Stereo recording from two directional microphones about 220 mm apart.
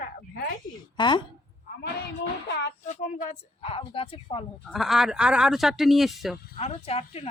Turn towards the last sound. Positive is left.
turn(degrees=25)  # may be behind; listen again after turning